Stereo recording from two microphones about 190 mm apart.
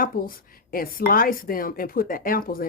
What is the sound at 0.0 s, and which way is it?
A woman's voice, 50° left (ahead or behind).